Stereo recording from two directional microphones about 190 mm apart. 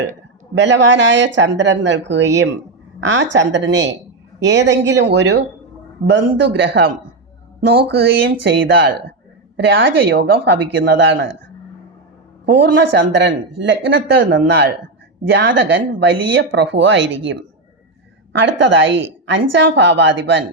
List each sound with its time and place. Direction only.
0.5 s speech: 70° right (ahead or behind)
12.5 s speech: 65° right (ahead or behind)
18.3 s speech: 70° right (ahead or behind)